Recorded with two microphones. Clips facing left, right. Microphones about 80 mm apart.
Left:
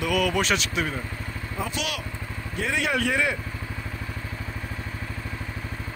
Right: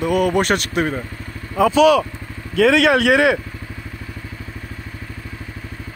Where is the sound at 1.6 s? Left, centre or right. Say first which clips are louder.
Right 19 dB; right.